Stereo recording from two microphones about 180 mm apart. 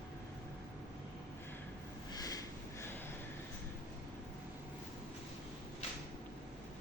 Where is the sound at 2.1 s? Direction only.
20° left (ahead or behind).